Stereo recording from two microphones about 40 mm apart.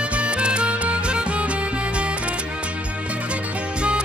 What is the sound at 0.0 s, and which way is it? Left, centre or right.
Music, right.